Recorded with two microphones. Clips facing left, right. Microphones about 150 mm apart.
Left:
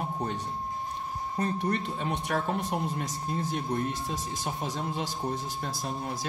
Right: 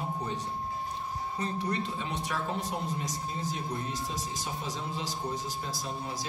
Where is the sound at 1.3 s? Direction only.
55° left (ahead or behind).